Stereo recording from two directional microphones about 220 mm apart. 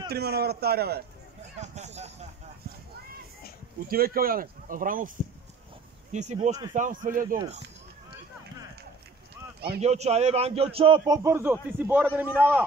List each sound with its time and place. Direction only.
0.1 s a man's voice: 45° right (ahead or behind)
1.6 s speech: 30° right (ahead or behind)
3.9 s speech: 40° right (ahead or behind)
6.1 s speech: 30° right (ahead or behind)
9.7 s a man's voice: 30° right (ahead or behind); by 12.6 s 10° right (ahead or behind)